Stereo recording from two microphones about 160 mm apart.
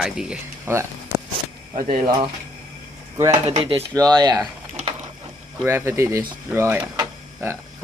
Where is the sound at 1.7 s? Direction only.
55° right (ahead or behind).